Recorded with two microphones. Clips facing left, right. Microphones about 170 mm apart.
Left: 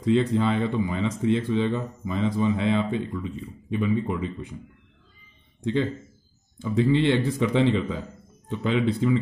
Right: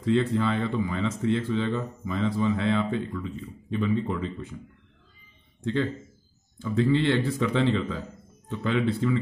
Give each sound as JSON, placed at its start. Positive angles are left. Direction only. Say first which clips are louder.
{"t": 0.0, "sound": "speech", "louder": "left 2 dB", "side_deg": 15}
{"t": 5.6, "sound": "speech", "louder": "left 2 dB", "side_deg": 15}